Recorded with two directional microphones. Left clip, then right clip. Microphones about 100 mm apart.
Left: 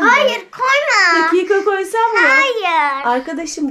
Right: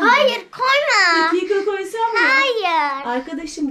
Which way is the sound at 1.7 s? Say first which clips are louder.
Left 6 dB; 20° right (ahead or behind).